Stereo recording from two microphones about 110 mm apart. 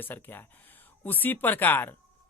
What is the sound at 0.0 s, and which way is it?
A man's voice, 20° left (ahead or behind).